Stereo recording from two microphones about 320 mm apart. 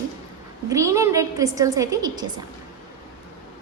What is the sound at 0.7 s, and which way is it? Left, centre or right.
A woman's voice, centre.